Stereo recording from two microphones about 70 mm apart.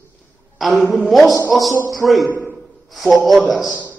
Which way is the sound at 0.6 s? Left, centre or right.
Centre.